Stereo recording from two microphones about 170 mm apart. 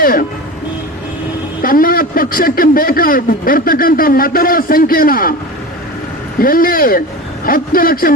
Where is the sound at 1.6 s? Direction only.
55° left (ahead or behind).